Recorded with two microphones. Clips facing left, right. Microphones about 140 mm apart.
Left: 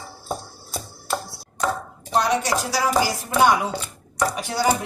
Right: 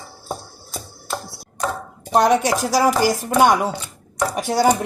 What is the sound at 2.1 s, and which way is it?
Speech, 50° right (ahead or behind).